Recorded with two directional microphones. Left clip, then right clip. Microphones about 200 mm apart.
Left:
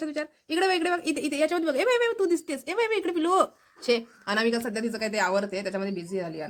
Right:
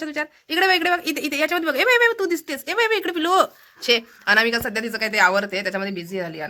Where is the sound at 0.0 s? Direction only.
5° left (ahead or behind).